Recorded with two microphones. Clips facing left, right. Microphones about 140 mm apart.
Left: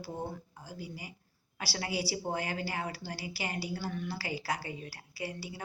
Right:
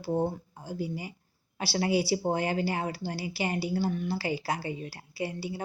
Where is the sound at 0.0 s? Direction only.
25° right (ahead or behind).